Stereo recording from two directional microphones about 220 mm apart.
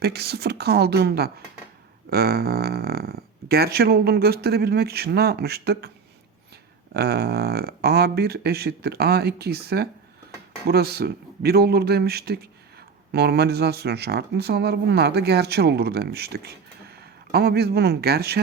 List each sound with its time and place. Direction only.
0.0 s speech: 45° right (ahead or behind)
6.9 s speech: 45° right (ahead or behind)